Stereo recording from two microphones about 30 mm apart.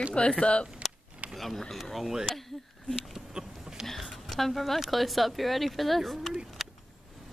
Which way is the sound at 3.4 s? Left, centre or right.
Right.